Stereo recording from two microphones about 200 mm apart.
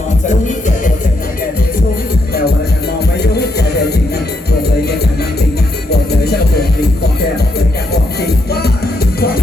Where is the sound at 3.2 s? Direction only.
55° left (ahead or behind).